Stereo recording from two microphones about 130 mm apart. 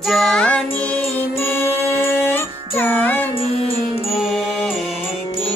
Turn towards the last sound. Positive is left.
turn(degrees=0)  # may be behind; listen again after turning